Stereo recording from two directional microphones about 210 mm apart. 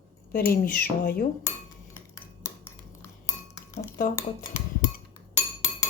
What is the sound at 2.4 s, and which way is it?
Cutlery, 10° left (ahead or behind).